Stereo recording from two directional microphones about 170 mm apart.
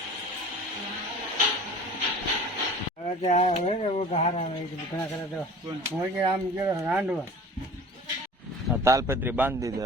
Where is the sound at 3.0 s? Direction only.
40° left (ahead or behind).